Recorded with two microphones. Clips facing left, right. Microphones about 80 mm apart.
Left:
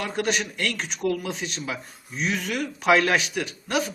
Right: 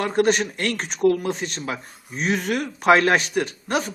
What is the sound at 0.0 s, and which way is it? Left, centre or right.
Speech, right.